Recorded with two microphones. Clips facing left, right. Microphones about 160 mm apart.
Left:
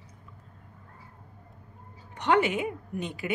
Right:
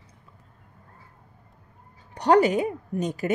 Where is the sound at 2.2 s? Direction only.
40° right (ahead or behind).